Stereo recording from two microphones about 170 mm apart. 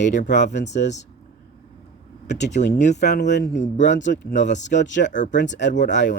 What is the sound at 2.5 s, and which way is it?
Speech, 85° left.